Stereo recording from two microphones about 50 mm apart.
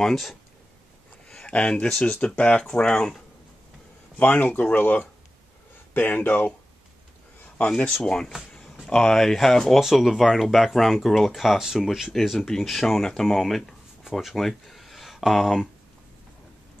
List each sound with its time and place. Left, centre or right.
0.0 s speech: centre
1.3 s a sound: left
1.9 s speech: centre
4.2 s speech: left
7.6 s speech: centre
9.8 s speech: centre
12.4 s speech: centre